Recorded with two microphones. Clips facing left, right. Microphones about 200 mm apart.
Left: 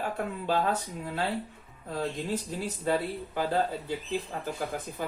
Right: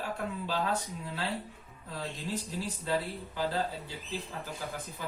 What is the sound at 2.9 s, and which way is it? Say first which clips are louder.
Speech: left 5 dB; 55° left (ahead or behind).